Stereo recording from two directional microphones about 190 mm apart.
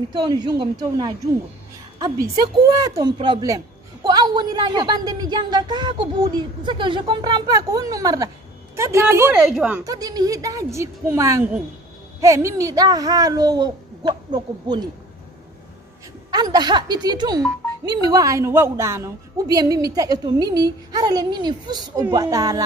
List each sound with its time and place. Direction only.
0.1 s a woman's voice: 20° right (ahead or behind); by 9.8 s 5° right (ahead or behind)
9.8 s a woman's voice: 20° right (ahead or behind)
16.3 s a woman's voice: 20° right (ahead or behind)